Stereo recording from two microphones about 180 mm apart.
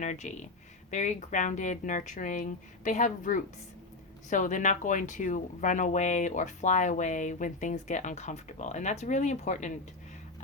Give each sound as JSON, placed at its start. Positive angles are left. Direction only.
{"t": 0.0, "sound": "speech", "side_deg": 40}